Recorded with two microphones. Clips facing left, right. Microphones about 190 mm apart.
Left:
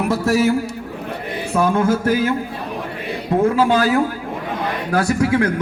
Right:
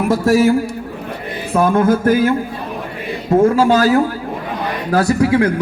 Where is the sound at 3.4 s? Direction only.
40° right (ahead or behind).